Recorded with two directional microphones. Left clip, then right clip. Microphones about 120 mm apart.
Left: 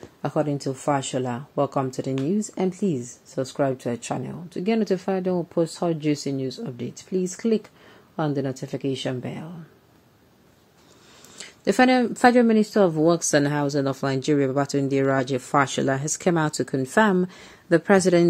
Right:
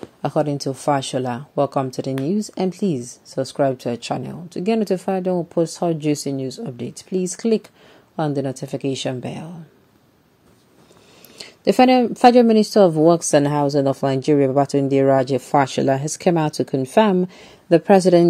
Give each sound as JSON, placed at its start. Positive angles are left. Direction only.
{"t": 0.2, "sound": "speech", "side_deg": -30}
{"t": 11.3, "sound": "speech", "side_deg": -30}